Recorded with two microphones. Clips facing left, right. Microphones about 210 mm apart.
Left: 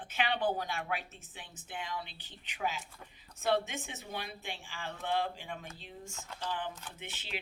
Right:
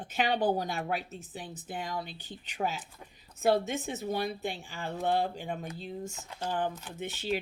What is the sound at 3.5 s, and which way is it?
Speech, 40° right (ahead or behind).